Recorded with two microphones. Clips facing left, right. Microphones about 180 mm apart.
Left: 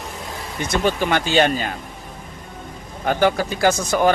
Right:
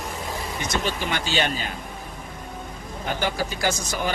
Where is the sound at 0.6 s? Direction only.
55° left (ahead or behind).